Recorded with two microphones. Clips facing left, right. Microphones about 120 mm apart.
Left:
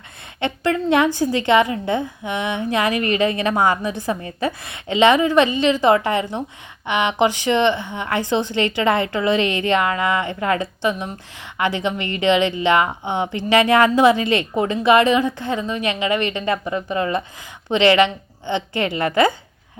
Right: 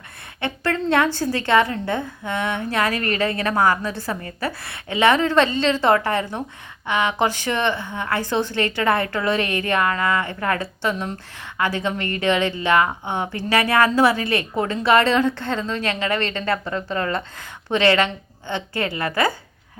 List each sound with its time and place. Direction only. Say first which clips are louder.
0.3 s a woman's voice: left 3 dB; 20° left (ahead or behind)